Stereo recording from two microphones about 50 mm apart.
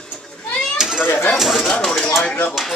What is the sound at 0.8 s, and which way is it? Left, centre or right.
Children playing, centre.